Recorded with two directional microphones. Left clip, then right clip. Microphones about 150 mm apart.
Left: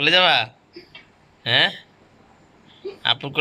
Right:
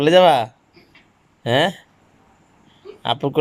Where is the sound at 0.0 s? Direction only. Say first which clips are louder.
Right 4 dB; 50° right (ahead or behind).